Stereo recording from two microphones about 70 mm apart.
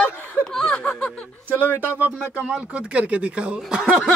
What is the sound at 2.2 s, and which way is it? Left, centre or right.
Speech, centre.